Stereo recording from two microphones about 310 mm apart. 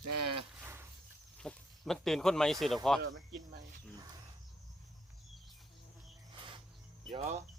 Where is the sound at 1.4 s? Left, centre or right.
Centre.